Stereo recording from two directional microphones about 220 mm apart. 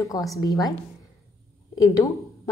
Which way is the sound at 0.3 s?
15° left (ahead or behind).